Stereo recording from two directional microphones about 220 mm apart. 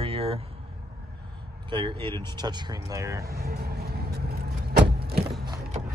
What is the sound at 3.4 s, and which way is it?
Vehicle, 45° right (ahead or behind).